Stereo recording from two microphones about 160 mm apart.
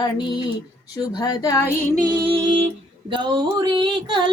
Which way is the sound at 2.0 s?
30° right (ahead or behind).